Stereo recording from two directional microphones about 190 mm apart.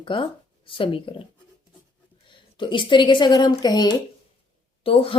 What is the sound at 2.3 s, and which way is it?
A woman's voice, 25° left (ahead or behind).